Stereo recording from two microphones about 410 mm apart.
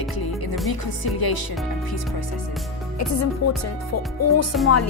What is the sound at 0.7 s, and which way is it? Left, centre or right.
Music, left.